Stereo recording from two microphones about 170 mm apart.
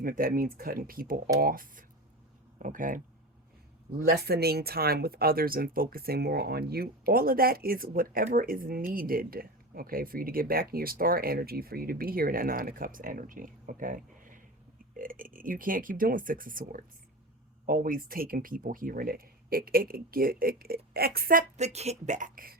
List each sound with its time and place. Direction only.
0.0 s speech: 55° right (ahead or behind)
3.9 s speech: 65° right (ahead or behind)
21.6 s speech: 40° right (ahead or behind)